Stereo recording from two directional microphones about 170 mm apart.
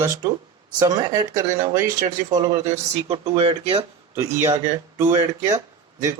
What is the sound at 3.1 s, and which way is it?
Speech, 35° right (ahead or behind).